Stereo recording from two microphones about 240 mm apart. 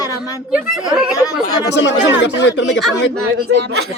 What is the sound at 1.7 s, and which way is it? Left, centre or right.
Speech, left.